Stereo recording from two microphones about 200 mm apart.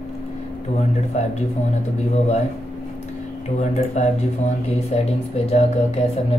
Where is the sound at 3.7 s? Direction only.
35° left (ahead or behind).